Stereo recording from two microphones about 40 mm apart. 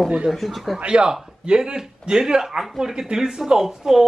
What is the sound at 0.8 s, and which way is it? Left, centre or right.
Speech, right.